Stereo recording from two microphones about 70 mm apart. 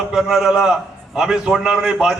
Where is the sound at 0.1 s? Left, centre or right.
Centre.